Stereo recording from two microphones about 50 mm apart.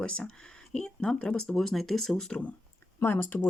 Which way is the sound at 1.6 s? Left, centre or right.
Centre.